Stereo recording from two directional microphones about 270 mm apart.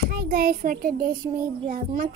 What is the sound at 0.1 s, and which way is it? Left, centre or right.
Child singing, right.